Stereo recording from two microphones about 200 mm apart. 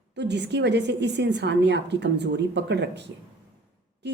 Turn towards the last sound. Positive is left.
turn(degrees=-60)  # may be behind; listen again after turning